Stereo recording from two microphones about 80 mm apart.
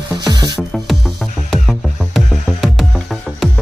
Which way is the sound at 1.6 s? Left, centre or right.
Centre.